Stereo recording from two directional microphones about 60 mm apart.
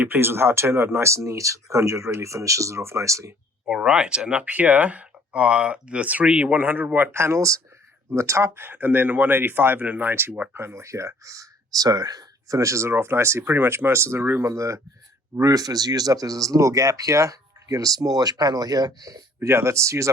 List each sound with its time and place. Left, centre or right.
0.2 s speech: right
3.7 s speech: centre
6.5 s speech: right
7.1 s speech: right
8.5 s speech: right
10.5 s speech: right
12.9 s speech: right
14.4 s speech: right
15.4 s speech: right